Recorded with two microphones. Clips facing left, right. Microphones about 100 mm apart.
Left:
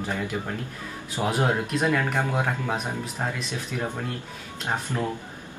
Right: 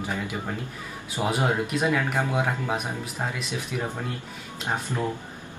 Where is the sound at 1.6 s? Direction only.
5° right (ahead or behind).